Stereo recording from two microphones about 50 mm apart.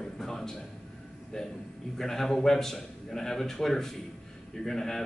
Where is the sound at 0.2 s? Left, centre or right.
Centre.